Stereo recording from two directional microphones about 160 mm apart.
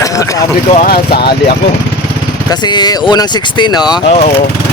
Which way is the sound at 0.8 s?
75° left (ahead or behind).